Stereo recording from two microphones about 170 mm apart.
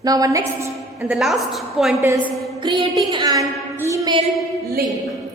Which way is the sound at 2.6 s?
25° right (ahead or behind).